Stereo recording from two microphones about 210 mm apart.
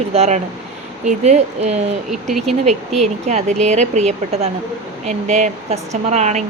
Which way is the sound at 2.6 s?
30° right (ahead or behind).